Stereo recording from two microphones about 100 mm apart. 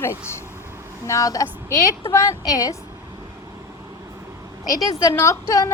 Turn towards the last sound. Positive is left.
turn(degrees=35)  # may be behind; listen again after turning